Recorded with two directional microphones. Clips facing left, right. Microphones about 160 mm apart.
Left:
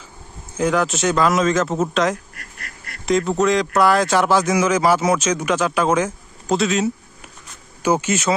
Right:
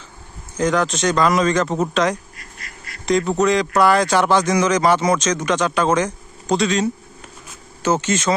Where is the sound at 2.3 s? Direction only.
65° left (ahead or behind).